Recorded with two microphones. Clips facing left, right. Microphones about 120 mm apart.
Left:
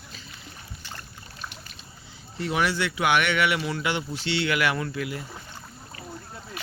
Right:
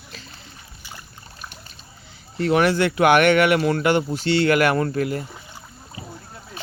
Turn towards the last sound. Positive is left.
turn(degrees=-45)  # may be behind; listen again after turning